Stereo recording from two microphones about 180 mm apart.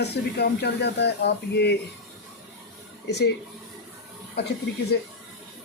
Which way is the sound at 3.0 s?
70° left (ahead or behind).